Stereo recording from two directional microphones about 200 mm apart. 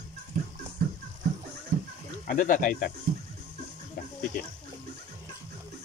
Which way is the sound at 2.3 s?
40° left (ahead or behind).